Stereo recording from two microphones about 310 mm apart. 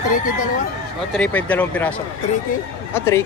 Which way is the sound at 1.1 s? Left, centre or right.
Centre.